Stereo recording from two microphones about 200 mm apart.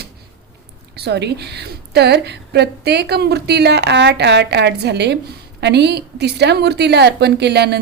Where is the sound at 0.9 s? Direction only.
55° right (ahead or behind).